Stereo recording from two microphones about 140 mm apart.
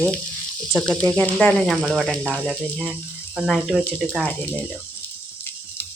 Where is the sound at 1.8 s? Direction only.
Centre (ahead or behind).